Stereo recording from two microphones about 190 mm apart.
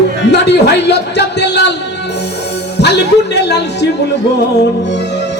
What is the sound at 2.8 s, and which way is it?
Speech, 65° left (ahead or behind).